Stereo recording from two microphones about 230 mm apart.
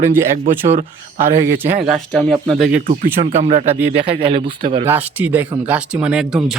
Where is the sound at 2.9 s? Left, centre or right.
Right.